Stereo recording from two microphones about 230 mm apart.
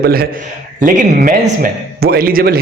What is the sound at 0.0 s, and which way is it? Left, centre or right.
A man's voice, right.